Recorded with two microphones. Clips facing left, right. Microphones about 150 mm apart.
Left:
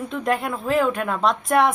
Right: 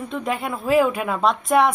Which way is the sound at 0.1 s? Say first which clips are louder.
Left 2 dB; centre (ahead or behind).